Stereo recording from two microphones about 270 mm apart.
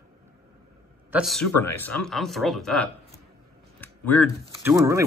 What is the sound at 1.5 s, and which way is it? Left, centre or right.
Speech, left.